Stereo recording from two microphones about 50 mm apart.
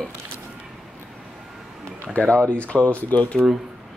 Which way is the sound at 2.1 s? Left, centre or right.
Left.